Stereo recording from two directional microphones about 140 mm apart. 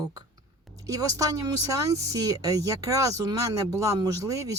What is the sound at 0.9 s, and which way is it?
Speech, 25° right (ahead or behind).